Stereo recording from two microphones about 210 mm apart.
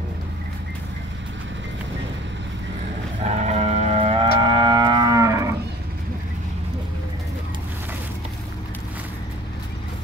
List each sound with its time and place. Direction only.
3.3 s moo: 30° right (ahead or behind)
4.4 s cattle: 25° right (ahead or behind)